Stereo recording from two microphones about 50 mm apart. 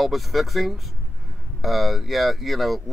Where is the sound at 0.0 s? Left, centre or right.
Centre.